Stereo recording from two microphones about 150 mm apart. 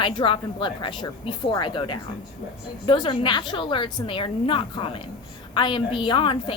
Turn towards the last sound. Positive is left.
turn(degrees=35)  # may be behind; listen again after turning